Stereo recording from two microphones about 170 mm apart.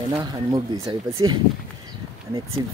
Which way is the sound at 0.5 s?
25° right (ahead or behind).